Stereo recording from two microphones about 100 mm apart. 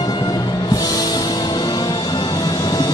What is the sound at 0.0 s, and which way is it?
Music, 45° left (ahead or behind).